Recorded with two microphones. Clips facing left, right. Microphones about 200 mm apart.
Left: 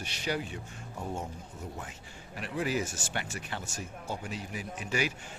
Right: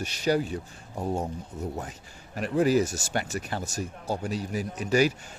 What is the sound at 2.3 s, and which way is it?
Speech, 45° right (ahead or behind).